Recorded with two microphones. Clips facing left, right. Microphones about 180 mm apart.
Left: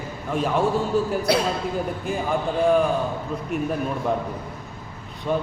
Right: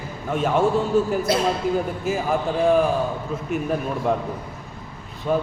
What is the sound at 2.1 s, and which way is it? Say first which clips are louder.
Speech: right 4 dB; 5° right (ahead or behind).